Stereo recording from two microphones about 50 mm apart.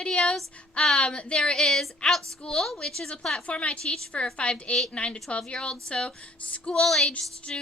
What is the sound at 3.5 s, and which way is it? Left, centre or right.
Speech, left.